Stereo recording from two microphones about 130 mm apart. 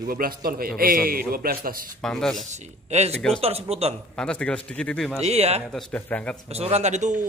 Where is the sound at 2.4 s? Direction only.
60° right (ahead or behind).